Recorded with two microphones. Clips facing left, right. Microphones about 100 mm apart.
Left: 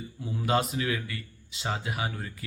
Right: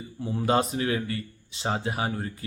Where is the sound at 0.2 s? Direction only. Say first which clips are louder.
Right 3 dB; 35° right (ahead or behind).